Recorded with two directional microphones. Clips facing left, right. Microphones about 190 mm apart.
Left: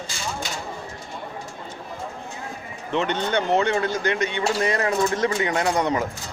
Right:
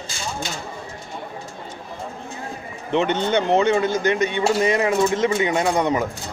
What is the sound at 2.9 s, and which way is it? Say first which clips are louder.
Speech: right 4 dB; 15° right (ahead or behind).